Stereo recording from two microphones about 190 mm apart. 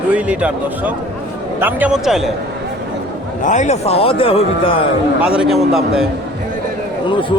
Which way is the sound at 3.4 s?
40° left (ahead or behind).